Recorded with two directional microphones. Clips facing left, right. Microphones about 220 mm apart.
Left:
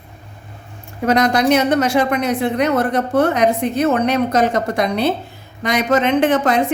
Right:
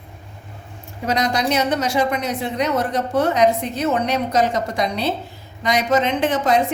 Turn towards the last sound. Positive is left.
turn(degrees=55)  # may be behind; listen again after turning